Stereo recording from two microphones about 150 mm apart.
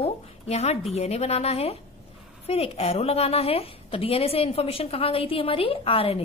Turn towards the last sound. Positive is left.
turn(degrees=40)  # may be behind; listen again after turning